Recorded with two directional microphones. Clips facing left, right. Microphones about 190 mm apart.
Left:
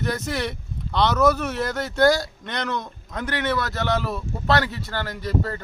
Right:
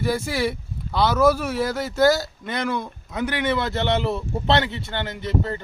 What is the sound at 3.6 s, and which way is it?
Speech, 25° right (ahead or behind).